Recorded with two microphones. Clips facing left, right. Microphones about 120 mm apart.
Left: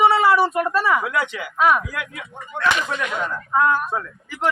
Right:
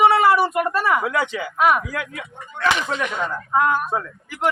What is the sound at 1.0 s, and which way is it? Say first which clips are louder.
Speech: right 2 dB; 30° right (ahead or behind).